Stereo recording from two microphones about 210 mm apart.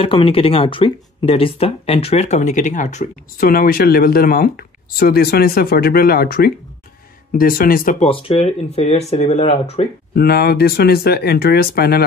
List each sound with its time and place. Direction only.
0.0 s speech: 25° left (ahead or behind)
10.1 s speech: 50° left (ahead or behind)